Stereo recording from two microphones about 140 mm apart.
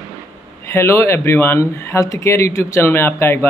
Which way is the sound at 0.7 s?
20° left (ahead or behind).